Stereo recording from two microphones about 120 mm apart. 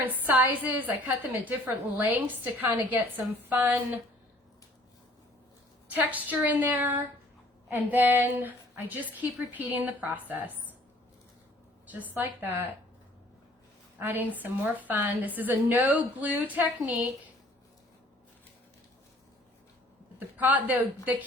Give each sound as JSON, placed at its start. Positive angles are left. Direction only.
{"t": 0.0, "sound": "a woman's voice", "side_deg": -15}
{"t": 5.9, "sound": "a woman's voice", "side_deg": -15}
{"t": 11.9, "sound": "a woman's voice", "side_deg": -15}
{"t": 14.0, "sound": "a woman's voice", "side_deg": -15}
{"t": 20.1, "sound": "a woman's voice", "side_deg": -15}